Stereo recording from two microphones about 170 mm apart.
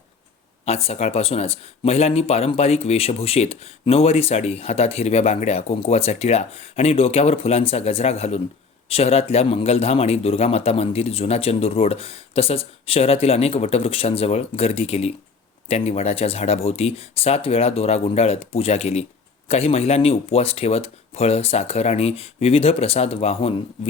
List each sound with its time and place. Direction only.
0.6 s speech: 35° left (ahead or behind)